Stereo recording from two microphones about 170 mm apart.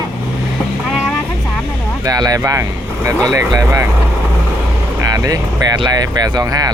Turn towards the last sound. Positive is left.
turn(degrees=-20)  # may be behind; listen again after turning